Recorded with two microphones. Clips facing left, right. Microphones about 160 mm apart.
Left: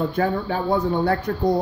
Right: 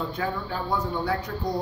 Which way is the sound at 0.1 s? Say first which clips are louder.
Left 7 dB; 65° left (ahead or behind).